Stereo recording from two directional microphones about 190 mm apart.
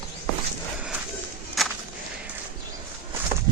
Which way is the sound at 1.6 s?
Centre (ahead or behind).